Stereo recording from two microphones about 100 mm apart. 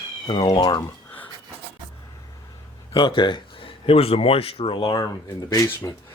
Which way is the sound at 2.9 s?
55° left (ahead or behind).